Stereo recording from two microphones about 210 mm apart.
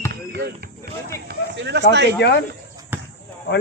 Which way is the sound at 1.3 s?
55° right (ahead or behind).